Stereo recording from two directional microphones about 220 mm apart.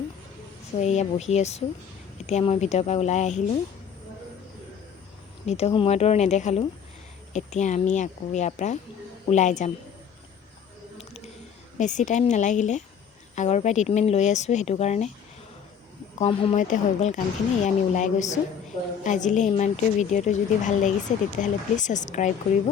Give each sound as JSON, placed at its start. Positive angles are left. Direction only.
{"t": 0.8, "sound": "a woman's voice", "side_deg": 30}
{"t": 5.5, "sound": "a woman's voice", "side_deg": 30}
{"t": 11.8, "sound": "a woman's voice", "side_deg": 35}
{"t": 16.1, "sound": "a woman's voice", "side_deg": 25}